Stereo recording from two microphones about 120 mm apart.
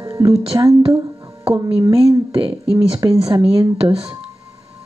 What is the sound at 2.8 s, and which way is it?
Speech, 35° right (ahead or behind).